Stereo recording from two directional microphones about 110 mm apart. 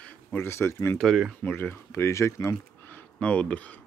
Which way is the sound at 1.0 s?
Centre (ahead or behind).